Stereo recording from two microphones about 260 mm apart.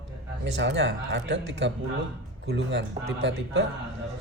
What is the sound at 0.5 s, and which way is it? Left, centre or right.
Speech, right.